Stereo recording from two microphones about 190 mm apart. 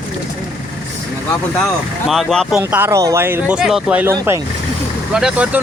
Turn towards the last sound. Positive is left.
turn(degrees=-5)  # may be behind; listen again after turning